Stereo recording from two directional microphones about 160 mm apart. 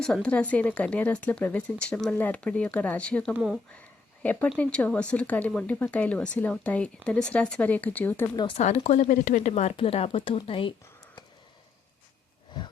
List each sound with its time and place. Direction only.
0.0 s speech: 5° left (ahead or behind)
3.3 s speech: 5° right (ahead or behind)
4.2 s speech: 10° left (ahead or behind)
8.5 s speech: 45° left (ahead or behind)